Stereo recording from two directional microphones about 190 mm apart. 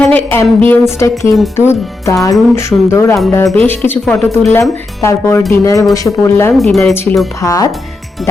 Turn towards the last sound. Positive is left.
turn(degrees=15)  # may be behind; listen again after turning